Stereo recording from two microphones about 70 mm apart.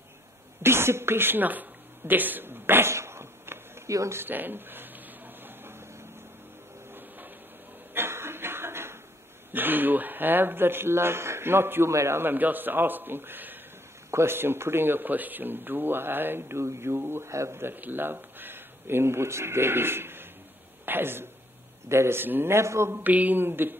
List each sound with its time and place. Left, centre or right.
0.6 s speech: right
3.9 s speech: right
4.2 s a sound: right
6.9 s printer: right
7.9 s chuckle: right
9.5 s speech: right